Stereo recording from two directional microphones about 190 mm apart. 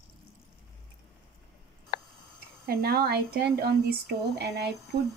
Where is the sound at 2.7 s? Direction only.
55° right (ahead or behind).